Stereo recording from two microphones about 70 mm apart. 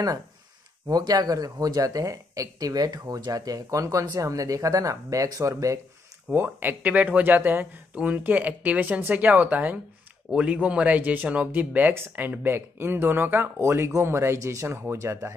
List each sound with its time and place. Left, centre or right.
0.8 s speech: right
6.3 s speech: right